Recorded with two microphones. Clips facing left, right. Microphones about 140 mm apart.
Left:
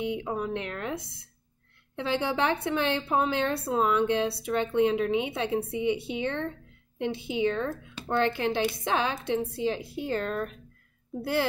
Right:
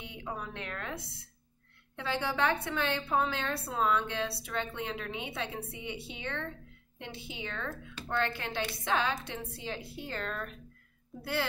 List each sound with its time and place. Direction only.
0.0 s a woman's voice: 20° left (ahead or behind)